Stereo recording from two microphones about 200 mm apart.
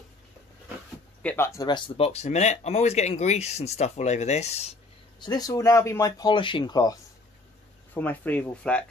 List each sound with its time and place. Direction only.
1.2 s speech: 10° left (ahead or behind); by 4.7 s 30° left (ahead or behind)
5.2 s speech: 20° left (ahead or behind)
7.9 s speech: 10° left (ahead or behind)